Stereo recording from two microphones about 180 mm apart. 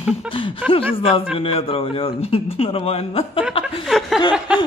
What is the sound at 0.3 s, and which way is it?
A man's voice, 30° left (ahead or behind).